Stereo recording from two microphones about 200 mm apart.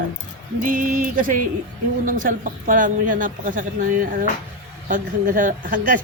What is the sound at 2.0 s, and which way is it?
Speech, 40° right (ahead or behind).